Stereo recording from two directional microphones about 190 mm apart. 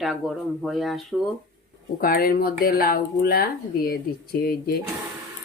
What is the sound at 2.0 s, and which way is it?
Speech, 50° left (ahead or behind).